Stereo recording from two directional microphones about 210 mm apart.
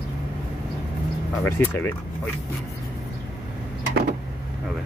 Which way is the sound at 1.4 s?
10° left (ahead or behind).